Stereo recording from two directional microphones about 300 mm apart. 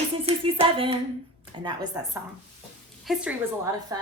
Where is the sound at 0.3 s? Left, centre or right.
Centre.